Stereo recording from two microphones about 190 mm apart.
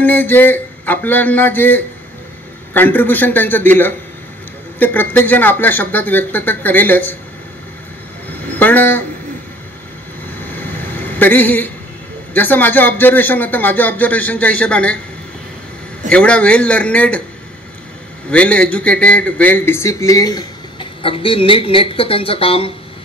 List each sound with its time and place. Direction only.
0.0 s a sound: 10° left (ahead or behind)
2.7 s a man's voice: 10° left (ahead or behind)
8.5 s speech: 10° left (ahead or behind)
10.5 s a sound: 10° left (ahead or behind)
12.4 s a man's voice: 10° left (ahead or behind)
16.1 s a man's voice: 5° left (ahead or behind)
18.3 s a man's voice: 5° left (ahead or behind); by 22.7 s 30° left (ahead or behind)